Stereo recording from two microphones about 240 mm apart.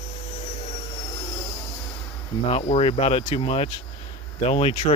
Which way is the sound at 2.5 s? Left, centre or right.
Left.